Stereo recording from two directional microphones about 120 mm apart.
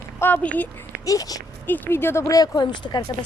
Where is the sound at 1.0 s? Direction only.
30° left (ahead or behind).